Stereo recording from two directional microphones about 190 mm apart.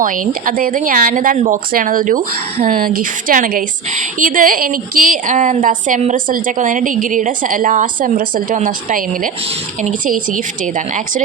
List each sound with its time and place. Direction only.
0.0 s speech: 45° right (ahead or behind)